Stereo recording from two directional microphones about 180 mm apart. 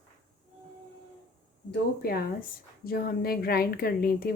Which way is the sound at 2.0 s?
60° left (ahead or behind).